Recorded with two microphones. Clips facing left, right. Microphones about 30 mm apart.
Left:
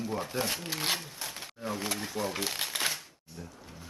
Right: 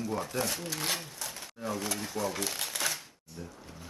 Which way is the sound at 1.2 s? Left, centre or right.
Left.